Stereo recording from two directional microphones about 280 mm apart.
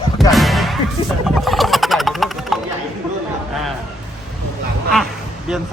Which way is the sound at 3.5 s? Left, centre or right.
Centre.